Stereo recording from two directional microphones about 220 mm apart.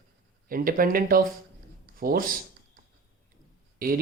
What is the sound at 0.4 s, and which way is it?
Speech, 40° right (ahead or behind).